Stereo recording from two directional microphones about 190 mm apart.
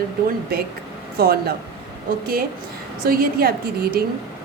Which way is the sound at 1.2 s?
55° right (ahead or behind).